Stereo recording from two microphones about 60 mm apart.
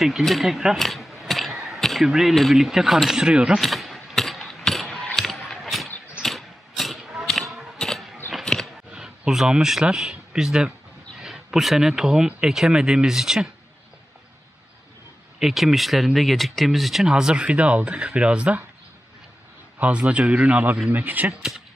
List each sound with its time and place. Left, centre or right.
0.0 s speech: centre
0.8 s mechanisms: centre
2.0 s speech: centre
3.5 s mechanisms: centre
5.1 s a sound: centre
6.2 s vehicle: centre
7.2 s a sound: centre
8.9 s speech: centre
15.3 s speech: centre
17.0 s speech: centre
19.8 s speech: right
21.3 s speech: centre